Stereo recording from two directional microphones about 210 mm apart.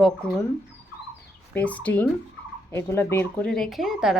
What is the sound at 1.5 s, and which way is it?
Speech, 5° left (ahead or behind).